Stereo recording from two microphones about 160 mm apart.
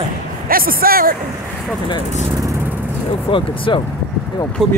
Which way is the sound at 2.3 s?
20° right (ahead or behind).